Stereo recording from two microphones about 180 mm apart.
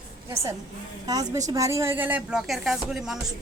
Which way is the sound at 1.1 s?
20° right (ahead or behind).